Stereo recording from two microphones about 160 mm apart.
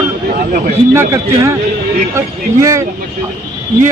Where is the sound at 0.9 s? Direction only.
20° right (ahead or behind).